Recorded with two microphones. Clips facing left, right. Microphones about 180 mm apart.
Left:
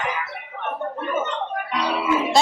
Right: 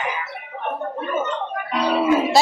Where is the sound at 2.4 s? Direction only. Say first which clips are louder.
Right 1 dB; 5° right (ahead or behind).